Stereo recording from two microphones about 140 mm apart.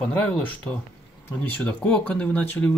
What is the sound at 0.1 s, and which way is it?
Speech, 10° left (ahead or behind).